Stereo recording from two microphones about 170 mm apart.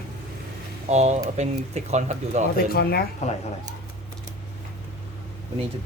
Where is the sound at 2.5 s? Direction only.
65° left (ahead or behind).